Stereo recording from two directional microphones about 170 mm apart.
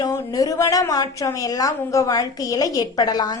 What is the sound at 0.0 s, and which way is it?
A woman's voice, 20° left (ahead or behind).